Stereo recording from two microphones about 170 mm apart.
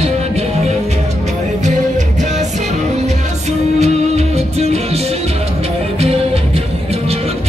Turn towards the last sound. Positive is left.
turn(degrees=-35)  # may be behind; listen again after turning